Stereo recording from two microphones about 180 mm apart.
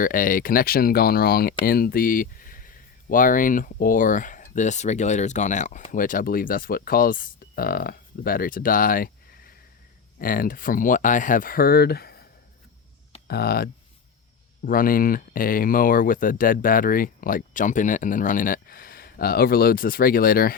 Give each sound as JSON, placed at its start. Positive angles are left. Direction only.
{"t": 0.0, "sound": "speech", "side_deg": 50}
{"t": 13.2, "sound": "speech", "side_deg": 60}